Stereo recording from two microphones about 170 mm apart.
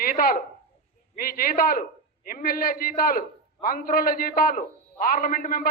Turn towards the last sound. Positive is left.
turn(degrees=55)  # may be behind; listen again after turning